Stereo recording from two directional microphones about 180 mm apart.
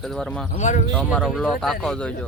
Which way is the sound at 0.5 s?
40° left (ahead or behind).